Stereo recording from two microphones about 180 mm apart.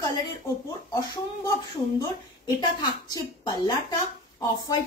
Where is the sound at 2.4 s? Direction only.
20° left (ahead or behind).